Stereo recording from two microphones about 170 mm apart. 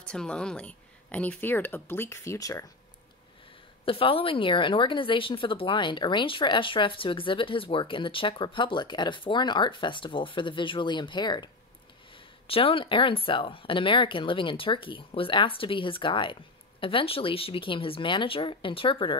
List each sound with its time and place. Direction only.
0.1 s speech: 5° left (ahead or behind)
3.8 s a woman's voice: 30° left (ahead or behind)